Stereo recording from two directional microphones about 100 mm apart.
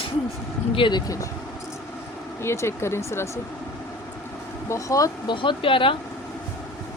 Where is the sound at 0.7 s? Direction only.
55° left (ahead or behind); by 1.3 s 35° left (ahead or behind).